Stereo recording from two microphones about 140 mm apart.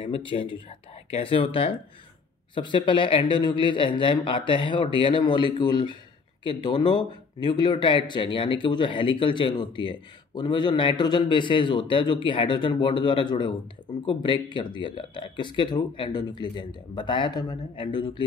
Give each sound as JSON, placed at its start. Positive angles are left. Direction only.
{"t": 0.0, "sound": "a man's voice", "side_deg": 35}